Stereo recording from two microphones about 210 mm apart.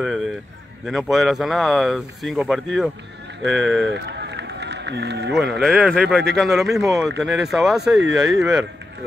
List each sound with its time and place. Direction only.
0.0 s a sound: centre (ahead or behind)
0.8 s speech: centre (ahead or behind)
3.9 s run: 55° right (ahead or behind)
5.3 s speech: centre (ahead or behind)